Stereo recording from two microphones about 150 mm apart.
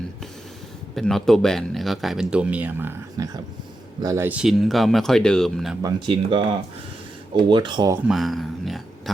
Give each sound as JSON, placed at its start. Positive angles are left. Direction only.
{"t": 0.9, "sound": "speech", "side_deg": 5}
{"t": 4.4, "sound": "speech", "side_deg": 0}
{"t": 5.8, "sound": "speech", "side_deg": -30}
{"t": 8.0, "sound": "a sound", "side_deg": 0}